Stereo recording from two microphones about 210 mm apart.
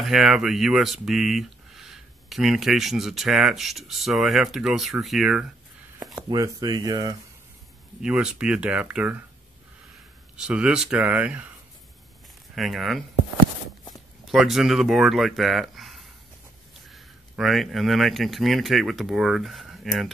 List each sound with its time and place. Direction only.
0.0 s speech: centre (ahead or behind)
5.9 s a sound: 5° right (ahead or behind)
6.2 s speech: 20° right (ahead or behind)
8.0 s speech: 5° right (ahead or behind)
10.3 s speech: 5° right (ahead or behind)
12.5 s speech: centre (ahead or behind)
14.2 s speech: centre (ahead or behind)